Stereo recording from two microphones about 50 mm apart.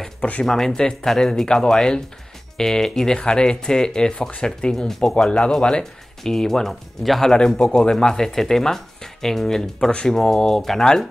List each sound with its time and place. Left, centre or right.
0.2 s speech: left
0.5 s speech: centre